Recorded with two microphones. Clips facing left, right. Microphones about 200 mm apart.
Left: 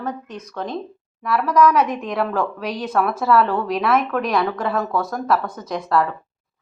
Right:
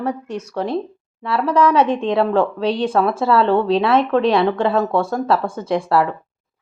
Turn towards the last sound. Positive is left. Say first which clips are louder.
# right 3 dB
turn(degrees=-30)  # may be behind; listen again after turning